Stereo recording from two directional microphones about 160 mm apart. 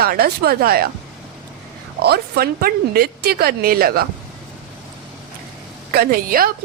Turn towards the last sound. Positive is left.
turn(degrees=-70)  # may be behind; listen again after turning